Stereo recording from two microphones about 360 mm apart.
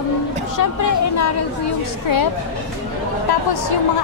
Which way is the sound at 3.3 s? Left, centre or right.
Left.